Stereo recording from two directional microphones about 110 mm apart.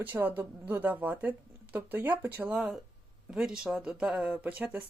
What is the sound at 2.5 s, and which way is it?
Speech, 5° right (ahead or behind).